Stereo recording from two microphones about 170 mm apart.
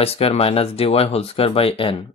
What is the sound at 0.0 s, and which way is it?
Speech, 35° left (ahead or behind).